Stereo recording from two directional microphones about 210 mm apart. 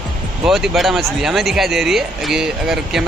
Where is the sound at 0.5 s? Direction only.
Centre (ahead or behind).